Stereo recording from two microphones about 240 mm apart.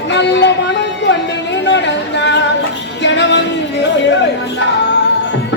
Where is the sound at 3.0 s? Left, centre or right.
Left.